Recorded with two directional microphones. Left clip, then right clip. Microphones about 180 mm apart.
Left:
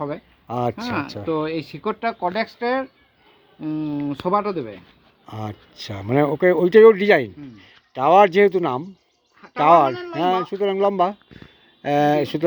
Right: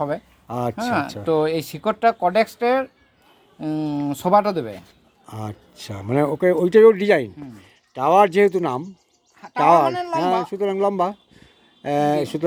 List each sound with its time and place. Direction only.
0.4 s speech: 5° left (ahead or behind)
1.2 s speech: 45° right (ahead or behind)
3.6 s speech: 50° right (ahead or behind)
5.2 s speech: 5° left (ahead or behind)
9.9 s speech: 65° right (ahead or behind)
10.4 s speech: centre (ahead or behind)